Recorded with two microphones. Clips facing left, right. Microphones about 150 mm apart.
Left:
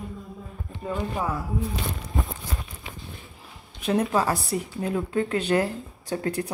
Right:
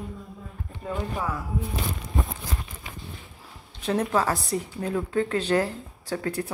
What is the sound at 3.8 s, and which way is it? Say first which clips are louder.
A woman's voice: left 1 dB; 15° left (ahead or behind).